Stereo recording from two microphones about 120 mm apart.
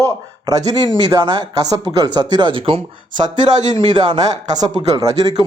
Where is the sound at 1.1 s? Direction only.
40° right (ahead or behind).